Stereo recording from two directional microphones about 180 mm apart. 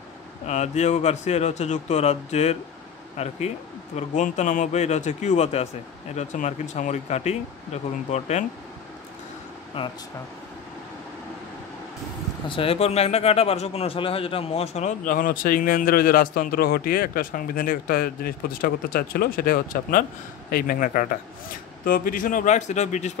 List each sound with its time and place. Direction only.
0.5 s speech: 40° left (ahead or behind)
9.8 s speech: 30° left (ahead or behind)
12.4 s speech: 30° left (ahead or behind)